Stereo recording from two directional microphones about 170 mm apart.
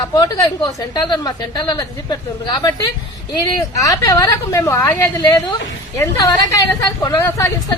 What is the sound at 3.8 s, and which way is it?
A woman's voice, 20° left (ahead or behind).